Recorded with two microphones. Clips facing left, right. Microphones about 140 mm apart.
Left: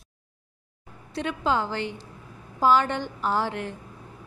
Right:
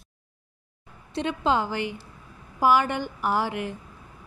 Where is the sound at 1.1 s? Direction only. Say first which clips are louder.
Right 1 dB; 20° right (ahead or behind).